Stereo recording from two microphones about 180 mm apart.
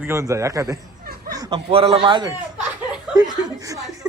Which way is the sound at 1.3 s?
20° right (ahead or behind).